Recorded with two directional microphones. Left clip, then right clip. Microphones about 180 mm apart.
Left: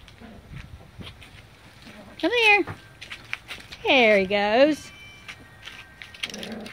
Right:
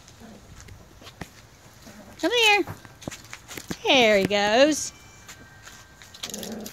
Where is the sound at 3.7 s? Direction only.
Centre (ahead or behind).